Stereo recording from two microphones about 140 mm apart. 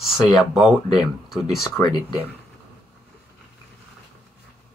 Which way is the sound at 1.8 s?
30° left (ahead or behind).